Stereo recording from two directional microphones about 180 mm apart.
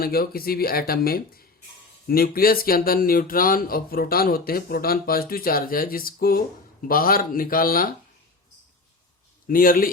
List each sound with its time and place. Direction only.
0.0 s speech: 55° left (ahead or behind)
9.5 s speech: 50° left (ahead or behind)